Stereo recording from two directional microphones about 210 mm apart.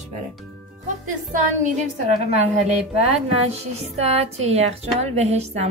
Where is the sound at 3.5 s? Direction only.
30° right (ahead or behind).